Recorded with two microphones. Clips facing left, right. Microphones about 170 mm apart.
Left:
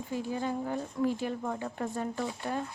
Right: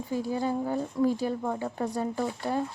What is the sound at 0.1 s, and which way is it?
Speech, 35° right (ahead or behind).